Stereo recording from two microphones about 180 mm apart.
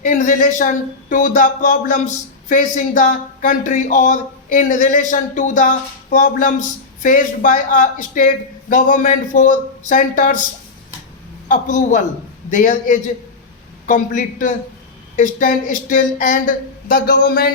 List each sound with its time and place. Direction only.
0.0 s speech: 45° left (ahead or behind)
11.4 s speech: 45° left (ahead or behind)